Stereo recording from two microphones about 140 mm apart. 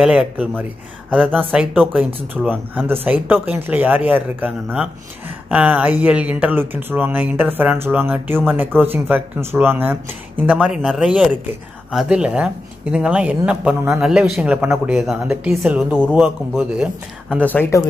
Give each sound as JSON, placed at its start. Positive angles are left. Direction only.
{"t": 0.0, "sound": "speech", "side_deg": -5}
{"t": 1.1, "sound": "speech", "side_deg": 5}
{"t": 1.5, "sound": "speech", "side_deg": -5}
{"t": 1.8, "sound": "speech", "side_deg": 5}
{"t": 2.5, "sound": "speech", "side_deg": -15}
{"t": 17.4, "sound": "speech", "side_deg": 15}